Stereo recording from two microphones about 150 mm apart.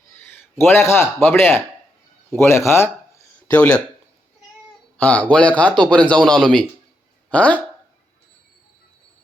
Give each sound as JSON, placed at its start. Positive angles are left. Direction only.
{"t": 0.2, "sound": "a man's voice", "side_deg": 15}
{"t": 4.9, "sound": "a man's voice", "side_deg": 10}